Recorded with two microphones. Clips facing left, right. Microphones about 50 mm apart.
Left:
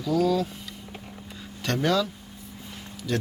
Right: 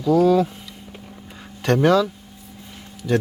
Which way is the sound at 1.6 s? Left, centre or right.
Right.